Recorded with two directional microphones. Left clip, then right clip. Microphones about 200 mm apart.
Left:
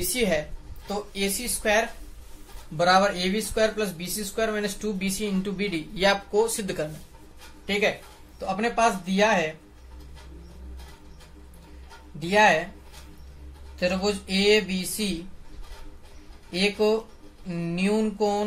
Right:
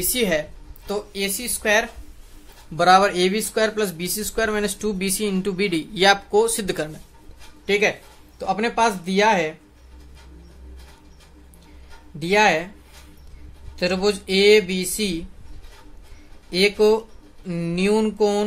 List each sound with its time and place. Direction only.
0.1 s speech: 55° right (ahead or behind)
12.2 s speech: 55° right (ahead or behind)
13.7 s speech: 50° right (ahead or behind)
16.4 s speech: 55° right (ahead or behind)